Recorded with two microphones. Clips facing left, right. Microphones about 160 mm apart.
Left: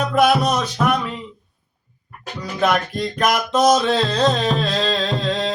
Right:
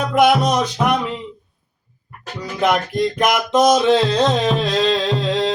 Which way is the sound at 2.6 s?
20° right (ahead or behind).